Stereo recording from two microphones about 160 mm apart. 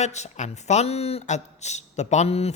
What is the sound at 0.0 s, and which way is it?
Speech, 45° left (ahead or behind).